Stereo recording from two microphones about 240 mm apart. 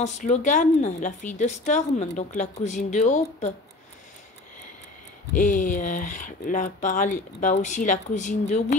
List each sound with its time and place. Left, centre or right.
0.0 s a woman's voice: left
5.3 s a woman's voice: left